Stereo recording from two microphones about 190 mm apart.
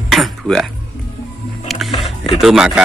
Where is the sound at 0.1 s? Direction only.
Centre (ahead or behind).